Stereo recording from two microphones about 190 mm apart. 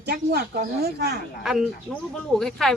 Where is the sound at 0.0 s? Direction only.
55° right (ahead or behind).